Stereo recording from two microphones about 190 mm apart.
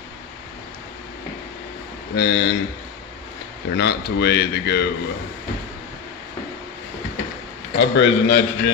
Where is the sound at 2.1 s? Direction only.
60° left (ahead or behind).